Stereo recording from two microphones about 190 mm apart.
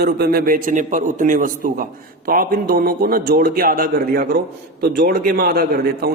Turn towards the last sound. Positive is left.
turn(degrees=-55)  # may be behind; listen again after turning